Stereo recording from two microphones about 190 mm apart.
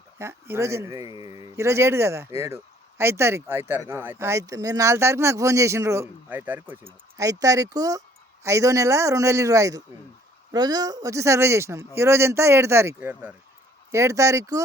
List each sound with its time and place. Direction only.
0.2 s speech: 15° right (ahead or behind)